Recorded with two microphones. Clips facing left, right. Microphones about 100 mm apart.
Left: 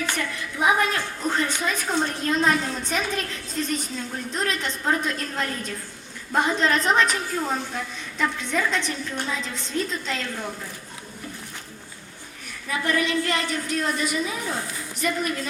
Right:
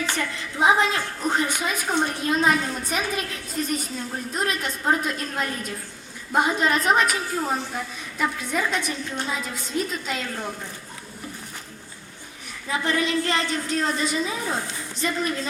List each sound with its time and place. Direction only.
0.2 s a woman's voice: 25° right (ahead or behind); by 10.5 s 5° right (ahead or behind)
12.6 s a woman's voice: 25° right (ahead or behind)